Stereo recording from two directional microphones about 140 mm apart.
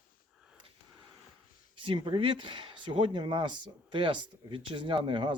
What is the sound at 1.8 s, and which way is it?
Speech, 40° right (ahead or behind).